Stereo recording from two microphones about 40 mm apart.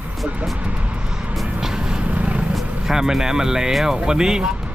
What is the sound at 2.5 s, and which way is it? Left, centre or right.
Speech, centre.